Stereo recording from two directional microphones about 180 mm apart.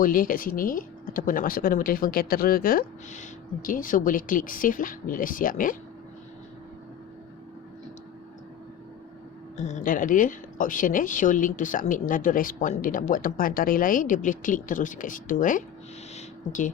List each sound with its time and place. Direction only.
0.0 s speech: 50° left (ahead or behind)
9.6 s speech: 40° left (ahead or behind)
16.1 s a sound: 45° left (ahead or behind)